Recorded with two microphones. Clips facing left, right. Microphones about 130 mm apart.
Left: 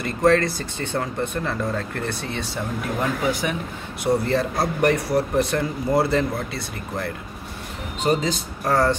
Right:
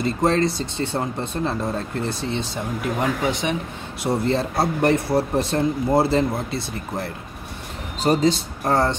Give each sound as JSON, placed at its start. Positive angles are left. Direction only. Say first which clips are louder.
{"t": 0.0, "sound": "speech", "louder": "left 1 dB", "side_deg": -25}